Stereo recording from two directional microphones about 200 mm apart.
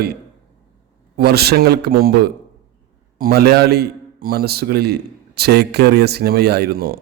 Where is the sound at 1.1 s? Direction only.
50° right (ahead or behind).